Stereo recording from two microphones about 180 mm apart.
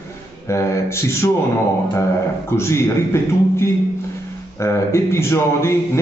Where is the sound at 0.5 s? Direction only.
15° left (ahead or behind).